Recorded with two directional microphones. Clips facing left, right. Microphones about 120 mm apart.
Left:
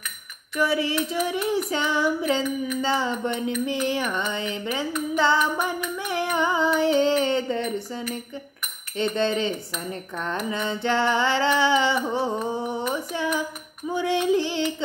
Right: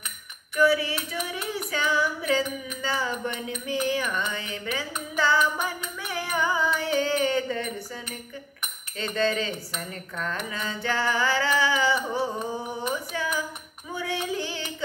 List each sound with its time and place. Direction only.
0.6 s mantra: 25° left (ahead or behind)
5.1 s female singing: 25° left (ahead or behind)
8.9 s mantra: 25° left (ahead or behind)
12.9 s a sound: 25° left (ahead or behind)
13.8 s child singing: 25° left (ahead or behind)